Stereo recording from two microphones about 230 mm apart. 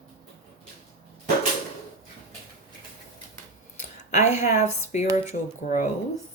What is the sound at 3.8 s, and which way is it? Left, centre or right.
Speech, left.